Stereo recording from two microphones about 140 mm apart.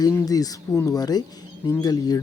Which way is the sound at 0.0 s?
25° left (ahead or behind).